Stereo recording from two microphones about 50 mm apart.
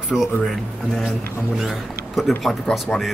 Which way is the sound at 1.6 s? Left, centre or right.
Centre.